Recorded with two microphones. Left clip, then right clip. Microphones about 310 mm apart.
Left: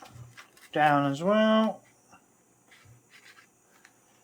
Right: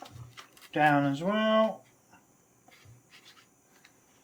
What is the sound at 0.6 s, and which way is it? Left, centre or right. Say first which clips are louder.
Speech: left 1 dB; centre.